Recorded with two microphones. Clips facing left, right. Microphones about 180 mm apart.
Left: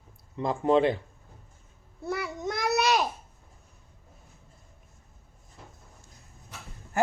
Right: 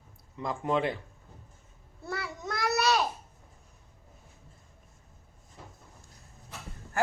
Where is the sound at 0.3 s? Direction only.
30° left (ahead or behind).